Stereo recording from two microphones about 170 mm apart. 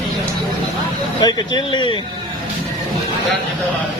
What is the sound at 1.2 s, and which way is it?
Speech, 25° left (ahead or behind).